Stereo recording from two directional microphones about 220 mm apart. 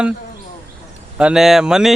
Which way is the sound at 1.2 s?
Centre (ahead or behind).